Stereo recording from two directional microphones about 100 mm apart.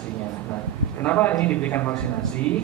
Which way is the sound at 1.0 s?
15° left (ahead or behind).